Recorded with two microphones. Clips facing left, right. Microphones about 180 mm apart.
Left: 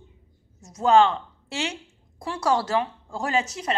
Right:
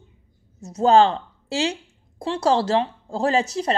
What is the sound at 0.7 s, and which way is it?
A woman's voice, 35° right (ahead or behind).